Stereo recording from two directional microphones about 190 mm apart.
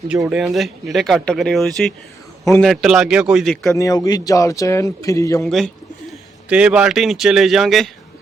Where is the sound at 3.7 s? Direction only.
15° left (ahead or behind).